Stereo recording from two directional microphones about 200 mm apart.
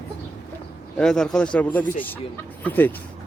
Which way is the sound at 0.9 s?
5° left (ahead or behind).